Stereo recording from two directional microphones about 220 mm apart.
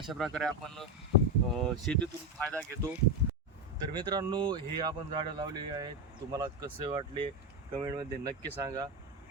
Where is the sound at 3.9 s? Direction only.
20° right (ahead or behind).